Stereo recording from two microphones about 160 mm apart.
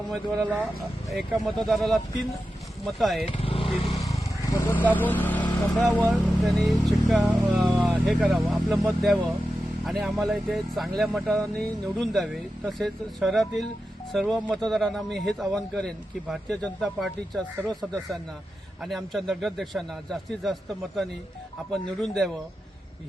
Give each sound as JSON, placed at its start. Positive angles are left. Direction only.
{"t": 1.1, "sound": "speech", "side_deg": 0}
{"t": 3.2, "sound": "vehicle", "side_deg": 35}
{"t": 4.1, "sound": "speech", "side_deg": 15}